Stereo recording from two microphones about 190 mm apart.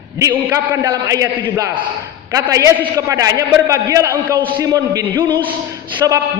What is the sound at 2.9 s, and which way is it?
A man's voice, 20° right (ahead or behind).